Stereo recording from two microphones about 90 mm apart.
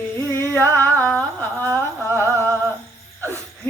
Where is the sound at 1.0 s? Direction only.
15° left (ahead or behind).